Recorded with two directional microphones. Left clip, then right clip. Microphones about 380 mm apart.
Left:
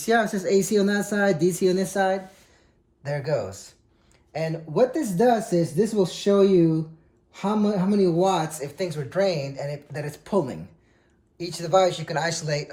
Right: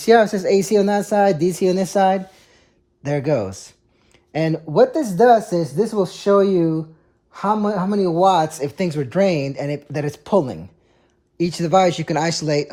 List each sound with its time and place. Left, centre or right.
0.0 s speech: centre
8.2 s speech: centre